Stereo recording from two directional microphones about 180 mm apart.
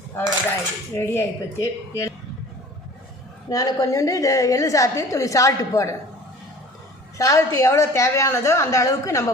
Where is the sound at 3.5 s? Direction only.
20° left (ahead or behind).